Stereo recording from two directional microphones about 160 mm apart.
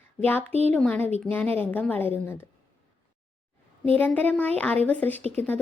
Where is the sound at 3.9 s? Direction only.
10° left (ahead or behind).